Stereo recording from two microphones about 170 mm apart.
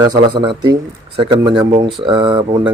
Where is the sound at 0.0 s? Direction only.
25° right (ahead or behind).